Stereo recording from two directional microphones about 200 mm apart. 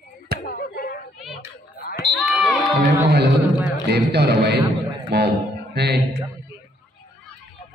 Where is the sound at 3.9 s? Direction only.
55° right (ahead or behind).